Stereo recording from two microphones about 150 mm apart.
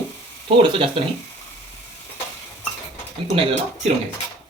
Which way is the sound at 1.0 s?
40° right (ahead or behind).